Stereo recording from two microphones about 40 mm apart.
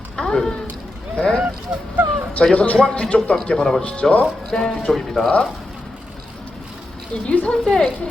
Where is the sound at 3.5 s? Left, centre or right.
Centre.